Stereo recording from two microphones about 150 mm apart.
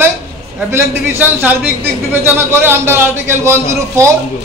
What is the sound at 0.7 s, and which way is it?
A man's voice, 15° right (ahead or behind).